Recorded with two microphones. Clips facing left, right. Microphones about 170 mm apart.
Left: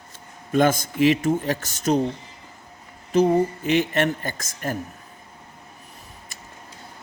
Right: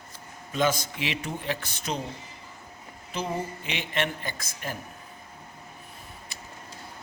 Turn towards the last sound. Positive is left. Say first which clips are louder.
# even
turn(degrees=45)  # may be behind; listen again after turning